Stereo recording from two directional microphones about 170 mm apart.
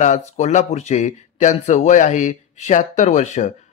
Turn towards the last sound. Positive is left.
turn(degrees=45)  # may be behind; listen again after turning